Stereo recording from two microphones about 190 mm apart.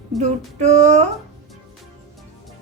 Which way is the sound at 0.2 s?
35° right (ahead or behind).